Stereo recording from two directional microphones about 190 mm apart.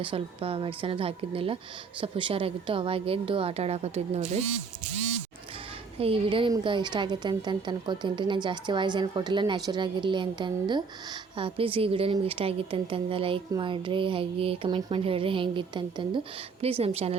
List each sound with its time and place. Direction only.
0.0 s a woman's voice: 30° right (ahead or behind)
6.0 s a woman's voice: 30° right (ahead or behind)